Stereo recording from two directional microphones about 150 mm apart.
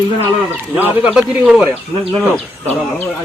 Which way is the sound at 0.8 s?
5° right (ahead or behind).